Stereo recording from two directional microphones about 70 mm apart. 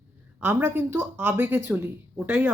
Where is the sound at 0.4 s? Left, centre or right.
Right.